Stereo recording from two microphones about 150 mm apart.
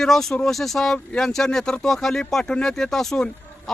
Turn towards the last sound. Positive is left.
turn(degrees=5)  # may be behind; listen again after turning